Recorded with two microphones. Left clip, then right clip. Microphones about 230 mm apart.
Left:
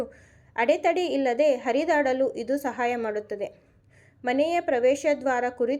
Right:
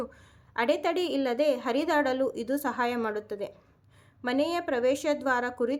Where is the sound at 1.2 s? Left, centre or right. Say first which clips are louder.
Left 5 dB; right.